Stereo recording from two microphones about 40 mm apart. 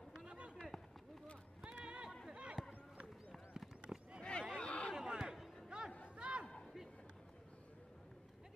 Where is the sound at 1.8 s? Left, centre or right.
Right.